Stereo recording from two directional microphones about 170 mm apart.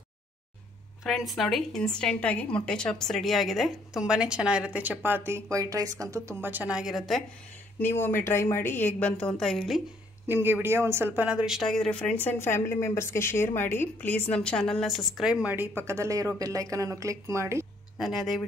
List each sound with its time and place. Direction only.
1.0 s a woman's voice: centre (ahead or behind)
7.8 s a woman's voice: 10° left (ahead or behind)
10.2 s a woman's voice: 10° right (ahead or behind)
17.9 s a woman's voice: centre (ahead or behind)